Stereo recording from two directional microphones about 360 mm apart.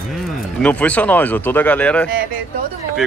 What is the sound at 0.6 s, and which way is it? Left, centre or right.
Speech, centre.